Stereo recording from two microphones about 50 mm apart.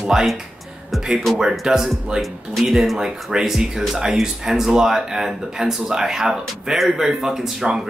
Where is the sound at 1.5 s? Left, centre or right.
Centre.